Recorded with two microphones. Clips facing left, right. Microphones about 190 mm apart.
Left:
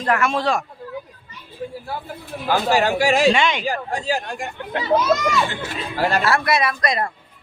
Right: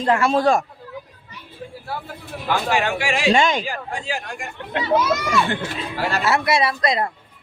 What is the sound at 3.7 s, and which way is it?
Speech, 40° left (ahead or behind).